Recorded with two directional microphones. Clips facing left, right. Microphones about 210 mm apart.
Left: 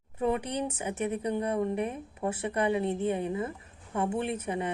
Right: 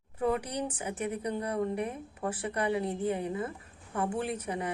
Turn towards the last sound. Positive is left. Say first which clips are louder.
# left 2 dB
turn(degrees=25)  # may be behind; listen again after turning